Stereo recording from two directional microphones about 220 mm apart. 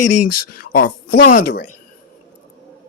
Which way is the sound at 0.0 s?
90° left.